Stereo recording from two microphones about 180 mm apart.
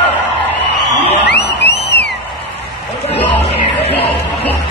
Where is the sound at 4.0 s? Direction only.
30° left (ahead or behind).